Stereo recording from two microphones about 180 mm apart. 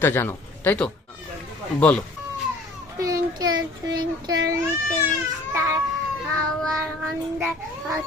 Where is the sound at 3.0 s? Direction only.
20° right (ahead or behind).